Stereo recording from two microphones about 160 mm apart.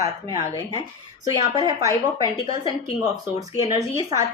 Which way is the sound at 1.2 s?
25° right (ahead or behind).